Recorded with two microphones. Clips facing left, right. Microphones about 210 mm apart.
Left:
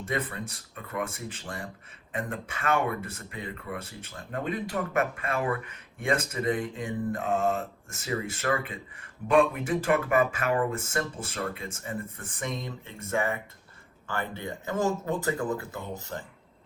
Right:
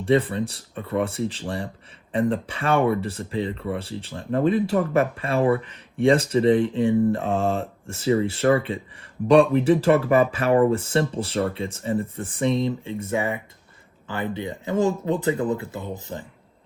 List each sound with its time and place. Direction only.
0.0 s speech: 30° right (ahead or behind)
12.6 s speech: 15° right (ahead or behind)
15.2 s speech: 25° right (ahead or behind)